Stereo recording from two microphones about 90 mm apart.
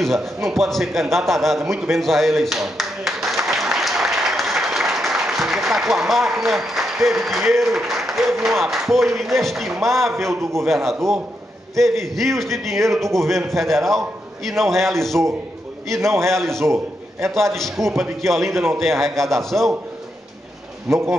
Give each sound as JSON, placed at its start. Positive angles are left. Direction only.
{"t": 0.0, "sound": "a man's voice", "side_deg": 0}
{"t": 10.2, "sound": "a man's voice", "side_deg": -30}
{"t": 10.7, "sound": "a man's voice", "side_deg": 0}
{"t": 16.3, "sound": "a man's voice", "side_deg": 5}
{"t": 16.5, "sound": "a man's voice", "side_deg": -30}
{"t": 17.6, "sound": "a man's voice", "side_deg": 5}